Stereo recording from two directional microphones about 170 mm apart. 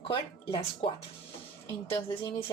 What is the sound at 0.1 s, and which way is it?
Speech, 30° left (ahead or behind).